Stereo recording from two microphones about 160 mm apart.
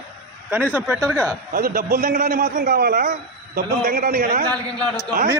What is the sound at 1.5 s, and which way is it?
A man's voice, 65° right (ahead or behind).